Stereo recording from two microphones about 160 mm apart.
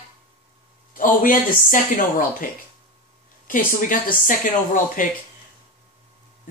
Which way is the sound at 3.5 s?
55° left (ahead or behind).